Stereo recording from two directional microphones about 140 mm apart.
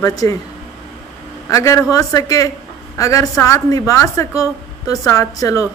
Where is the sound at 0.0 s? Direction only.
25° left (ahead or behind).